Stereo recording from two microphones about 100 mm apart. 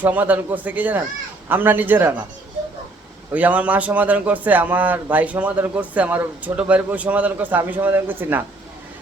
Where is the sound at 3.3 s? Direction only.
15° right (ahead or behind).